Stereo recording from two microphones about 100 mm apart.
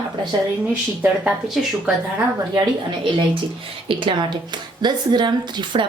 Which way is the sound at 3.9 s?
55° right (ahead or behind).